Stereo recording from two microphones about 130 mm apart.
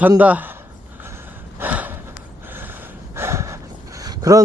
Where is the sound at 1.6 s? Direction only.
15° right (ahead or behind).